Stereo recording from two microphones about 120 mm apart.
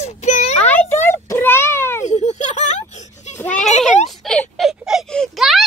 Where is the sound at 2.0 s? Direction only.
70° left (ahead or behind).